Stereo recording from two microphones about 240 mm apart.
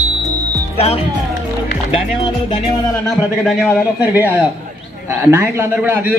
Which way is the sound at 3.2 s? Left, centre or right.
Centre.